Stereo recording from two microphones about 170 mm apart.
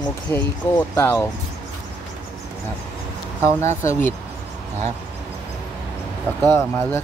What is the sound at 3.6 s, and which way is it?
Speech, 15° left (ahead or behind).